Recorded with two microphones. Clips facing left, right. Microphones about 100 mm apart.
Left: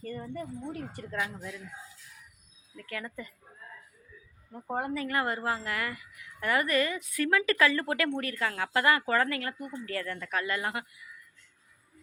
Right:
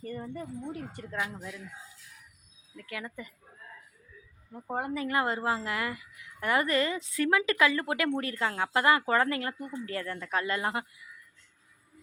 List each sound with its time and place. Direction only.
0.0 s a sound: 15° right (ahead or behind)
0.7 s speech: 15° right (ahead or behind)
2.7 s speech: 15° right (ahead or behind)
4.5 s speech: 10° right (ahead or behind); by 10.8 s 25° right (ahead or behind)